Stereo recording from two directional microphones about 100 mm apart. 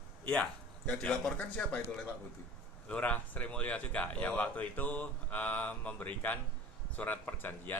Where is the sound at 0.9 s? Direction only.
10° left (ahead or behind).